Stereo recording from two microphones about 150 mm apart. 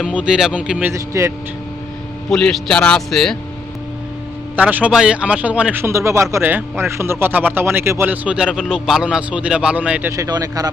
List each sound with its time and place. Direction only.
0.0 s a man's voice: 5° right (ahead or behind)
2.3 s a man's voice: 5° left (ahead or behind)
4.5 s a man's voice: 10° right (ahead or behind)
10.1 s speech: 25° right (ahead or behind)